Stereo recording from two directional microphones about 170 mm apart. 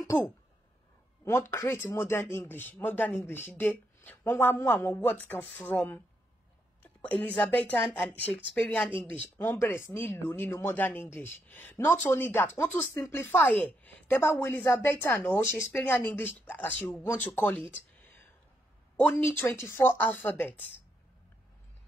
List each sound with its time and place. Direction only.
0.0 s speech: 20° left (ahead or behind)
18.9 s speech: 10° left (ahead or behind)